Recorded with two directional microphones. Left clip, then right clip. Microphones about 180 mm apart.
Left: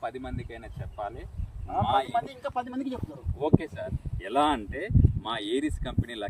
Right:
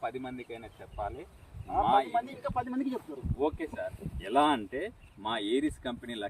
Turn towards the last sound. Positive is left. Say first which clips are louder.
# left 2 dB
turn(degrees=-5)  # may be behind; listen again after turning